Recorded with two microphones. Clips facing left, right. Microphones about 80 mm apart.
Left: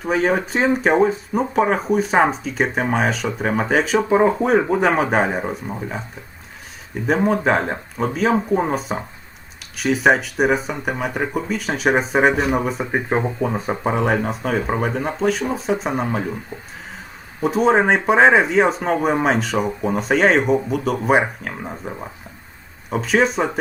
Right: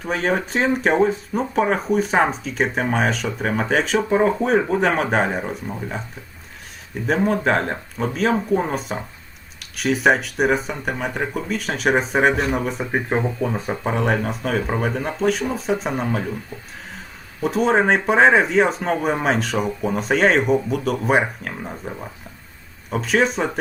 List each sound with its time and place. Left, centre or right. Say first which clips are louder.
0.0 s speech: left 3 dB; centre
7.1 s speech: left 1 dB; centre
13.1 s speech: left 2 dB; centre
13.9 s speech: left 1 dB; centre
16.0 s speech: left 1 dB; centre
17.4 s speech: left 2 dB; centre